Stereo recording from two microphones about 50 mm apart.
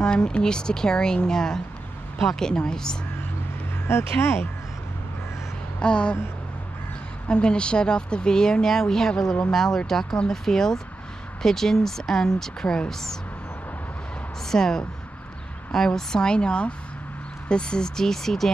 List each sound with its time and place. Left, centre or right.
0.0 s speech: centre
3.8 s speech: left
5.8 s a sound: centre
7.2 s speech: centre
14.5 s speech: centre